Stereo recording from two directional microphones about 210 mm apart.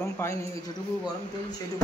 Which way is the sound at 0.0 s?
10° left (ahead or behind).